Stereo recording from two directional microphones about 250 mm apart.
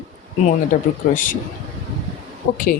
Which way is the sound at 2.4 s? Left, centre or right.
Left.